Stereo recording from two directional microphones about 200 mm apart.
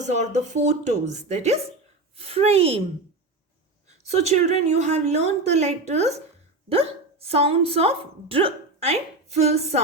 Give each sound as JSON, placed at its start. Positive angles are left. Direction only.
{"t": 0.0, "sound": "a woman's voice", "side_deg": -35}
{"t": 4.0, "sound": "a woman's voice", "side_deg": -30}